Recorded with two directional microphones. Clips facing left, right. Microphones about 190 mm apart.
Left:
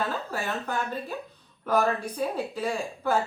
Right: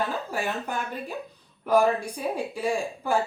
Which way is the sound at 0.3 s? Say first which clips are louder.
Right 1 dB; 10° right (ahead or behind).